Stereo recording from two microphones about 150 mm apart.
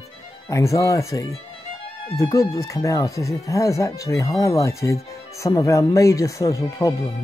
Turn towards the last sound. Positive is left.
turn(degrees=20)  # may be behind; listen again after turning